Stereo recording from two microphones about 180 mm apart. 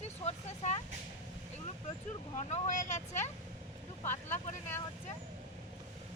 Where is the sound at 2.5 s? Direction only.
40° left (ahead or behind).